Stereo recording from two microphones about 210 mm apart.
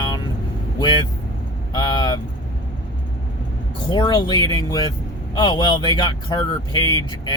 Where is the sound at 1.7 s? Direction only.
20° left (ahead or behind).